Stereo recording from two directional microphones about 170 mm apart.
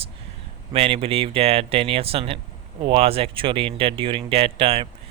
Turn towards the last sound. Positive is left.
turn(degrees=-35)  # may be behind; listen again after turning